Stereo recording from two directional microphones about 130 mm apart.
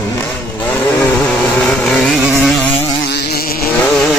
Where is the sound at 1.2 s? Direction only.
5° left (ahead or behind).